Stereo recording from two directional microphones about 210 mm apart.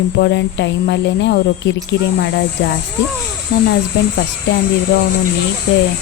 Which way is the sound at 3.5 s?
50° left (ahead or behind).